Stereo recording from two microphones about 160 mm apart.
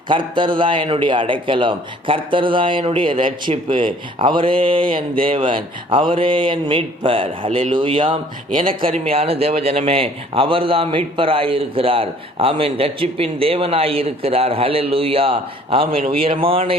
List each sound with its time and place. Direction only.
0.1 s a man's voice: 30° right (ahead or behind)